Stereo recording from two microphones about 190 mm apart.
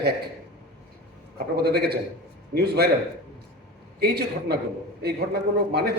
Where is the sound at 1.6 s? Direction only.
55° right (ahead or behind).